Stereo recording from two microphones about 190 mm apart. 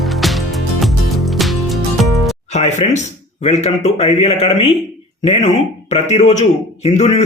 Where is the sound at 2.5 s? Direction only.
35° left (ahead or behind).